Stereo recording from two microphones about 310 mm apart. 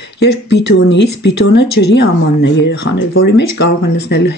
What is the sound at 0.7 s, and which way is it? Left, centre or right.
Speech, left.